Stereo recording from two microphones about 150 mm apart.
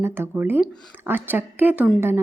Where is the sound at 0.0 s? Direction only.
15° right (ahead or behind).